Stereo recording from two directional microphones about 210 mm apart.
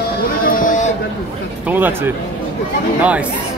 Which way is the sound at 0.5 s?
40° left (ahead or behind).